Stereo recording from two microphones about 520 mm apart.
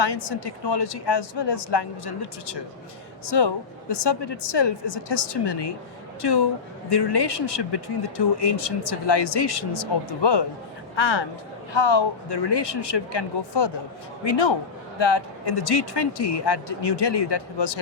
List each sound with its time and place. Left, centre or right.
0.0 s speech: left
3.2 s speech: left